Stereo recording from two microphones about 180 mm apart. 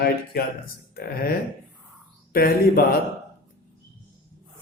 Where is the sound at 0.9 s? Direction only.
55° left (ahead or behind).